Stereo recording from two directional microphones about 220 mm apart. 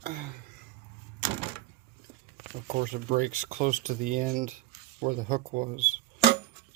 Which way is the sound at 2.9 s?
35° right (ahead or behind).